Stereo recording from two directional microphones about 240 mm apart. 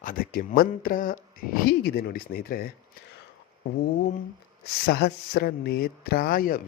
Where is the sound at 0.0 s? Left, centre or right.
Left.